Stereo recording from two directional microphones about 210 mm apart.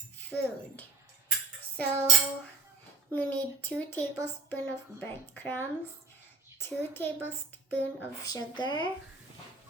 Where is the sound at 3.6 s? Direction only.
10° left (ahead or behind).